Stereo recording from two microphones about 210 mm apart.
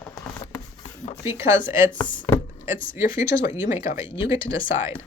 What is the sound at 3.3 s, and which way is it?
Speech, 45° left (ahead or behind).